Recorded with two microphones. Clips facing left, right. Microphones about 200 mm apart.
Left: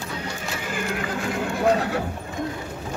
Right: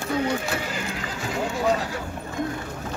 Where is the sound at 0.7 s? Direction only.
55° left (ahead or behind).